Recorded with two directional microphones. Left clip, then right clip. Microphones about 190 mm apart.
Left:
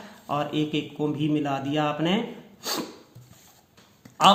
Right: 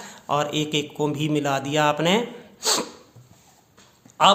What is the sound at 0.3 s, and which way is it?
Speech, 20° right (ahead or behind).